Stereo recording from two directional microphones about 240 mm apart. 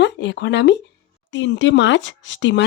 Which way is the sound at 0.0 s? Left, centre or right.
Left.